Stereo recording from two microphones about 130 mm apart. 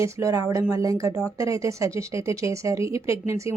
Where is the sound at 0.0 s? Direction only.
25° right (ahead or behind).